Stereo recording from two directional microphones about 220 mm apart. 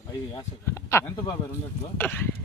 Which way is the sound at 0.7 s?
10° left (ahead or behind).